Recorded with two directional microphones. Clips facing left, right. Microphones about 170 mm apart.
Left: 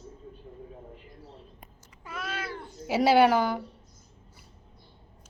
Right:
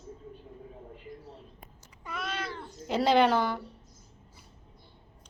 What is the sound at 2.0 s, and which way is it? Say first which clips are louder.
Cat: even; 5° left (ahead or behind).